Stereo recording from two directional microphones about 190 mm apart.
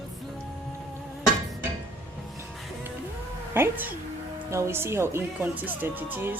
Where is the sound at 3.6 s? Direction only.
10° right (ahead or behind).